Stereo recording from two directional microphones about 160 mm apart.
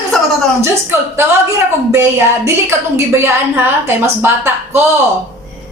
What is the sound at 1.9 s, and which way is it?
A woman's voice, 15° right (ahead or behind).